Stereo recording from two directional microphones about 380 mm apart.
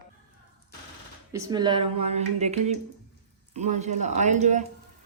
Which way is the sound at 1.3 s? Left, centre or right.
Centre.